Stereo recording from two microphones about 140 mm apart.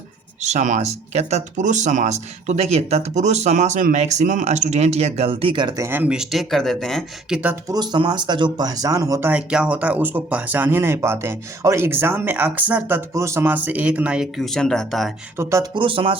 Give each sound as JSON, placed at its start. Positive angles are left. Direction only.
{"t": 0.4, "sound": "speech", "side_deg": -60}
{"t": 5.8, "sound": "speech", "side_deg": -15}
{"t": 7.7, "sound": "speech", "side_deg": -30}
{"t": 9.3, "sound": "speech", "side_deg": -10}
{"t": 15.4, "sound": "speech", "side_deg": -20}
{"t": 15.7, "sound": "speech", "side_deg": -35}